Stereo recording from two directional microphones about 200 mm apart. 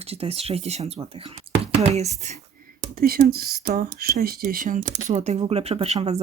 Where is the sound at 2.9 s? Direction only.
50° right (ahead or behind); by 6.2 s 35° right (ahead or behind).